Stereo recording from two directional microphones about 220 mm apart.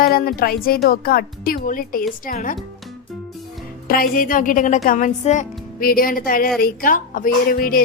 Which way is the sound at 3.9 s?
40° left (ahead or behind).